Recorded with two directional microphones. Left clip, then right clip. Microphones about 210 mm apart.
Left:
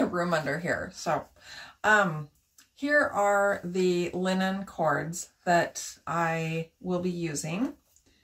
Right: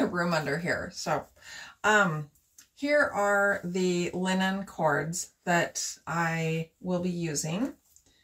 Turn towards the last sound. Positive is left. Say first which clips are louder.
# even
turn(degrees=0)  # may be behind; listen again after turning